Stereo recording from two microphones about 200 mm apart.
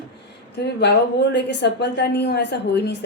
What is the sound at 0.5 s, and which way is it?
A woman's voice, 55° left (ahead or behind).